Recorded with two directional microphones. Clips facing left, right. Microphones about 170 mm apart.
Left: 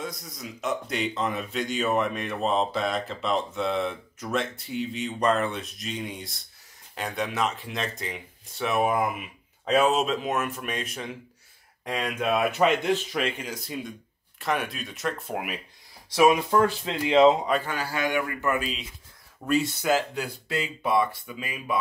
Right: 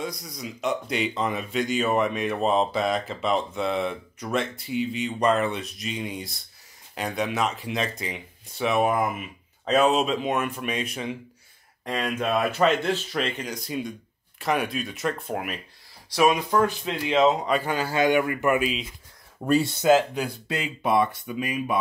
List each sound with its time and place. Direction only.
0.0 s speech: centre (ahead or behind)
11.8 s speech: 10° left (ahead or behind)
16.1 s speech: 20° left (ahead or behind)
17.6 s speech: 20° right (ahead or behind)
19.4 s speech: 30° right (ahead or behind)